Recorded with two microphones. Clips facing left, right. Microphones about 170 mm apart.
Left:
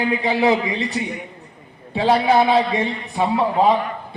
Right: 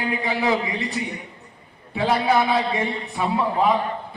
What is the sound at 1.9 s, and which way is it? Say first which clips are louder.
A man's voice: left 4 dB; 30° left (ahead or behind).